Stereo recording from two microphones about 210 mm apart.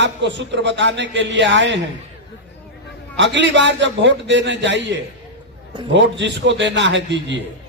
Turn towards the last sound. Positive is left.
turn(degrees=-60)  # may be behind; listen again after turning